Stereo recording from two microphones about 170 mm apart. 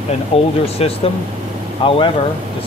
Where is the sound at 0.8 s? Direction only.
35° left (ahead or behind).